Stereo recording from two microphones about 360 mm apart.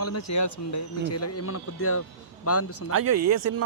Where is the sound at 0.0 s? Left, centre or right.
Left.